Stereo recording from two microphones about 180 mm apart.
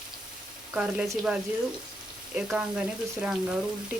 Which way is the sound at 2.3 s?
5° right (ahead or behind).